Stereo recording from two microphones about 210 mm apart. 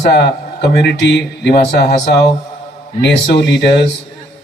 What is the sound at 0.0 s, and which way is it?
Speech, 55° left (ahead or behind).